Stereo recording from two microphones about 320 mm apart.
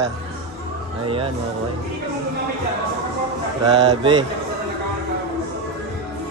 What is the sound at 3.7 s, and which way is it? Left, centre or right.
Speech, centre.